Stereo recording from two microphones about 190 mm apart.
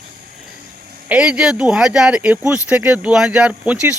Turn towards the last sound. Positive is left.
turn(degrees=-5)  # may be behind; listen again after turning